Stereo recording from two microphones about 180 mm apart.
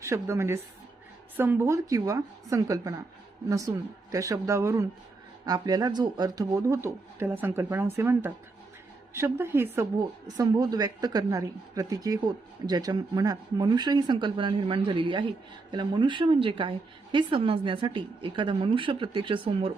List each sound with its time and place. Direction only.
0.0 s a woman's voice: 15° right (ahead or behind)